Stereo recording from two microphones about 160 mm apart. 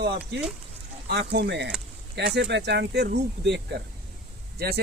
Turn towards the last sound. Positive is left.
turn(degrees=-75)  # may be behind; listen again after turning